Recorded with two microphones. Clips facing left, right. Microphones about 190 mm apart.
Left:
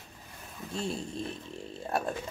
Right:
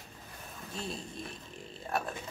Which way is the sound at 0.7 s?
25° left (ahead or behind).